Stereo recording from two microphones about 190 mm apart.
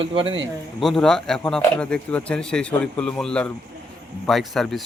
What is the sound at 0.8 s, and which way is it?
Speech, centre (ahead or behind).